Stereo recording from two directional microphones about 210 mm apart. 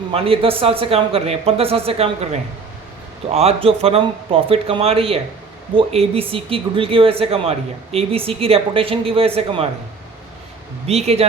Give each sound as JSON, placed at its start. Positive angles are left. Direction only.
{"t": 0.1, "sound": "speech", "side_deg": -25}
{"t": 10.8, "sound": "speech", "side_deg": -30}